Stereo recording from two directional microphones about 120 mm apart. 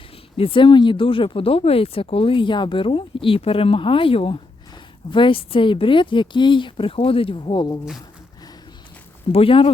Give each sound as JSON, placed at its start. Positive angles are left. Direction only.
{"t": 0.3, "sound": "speech", "side_deg": 50}
{"t": 9.3, "sound": "speech", "side_deg": 50}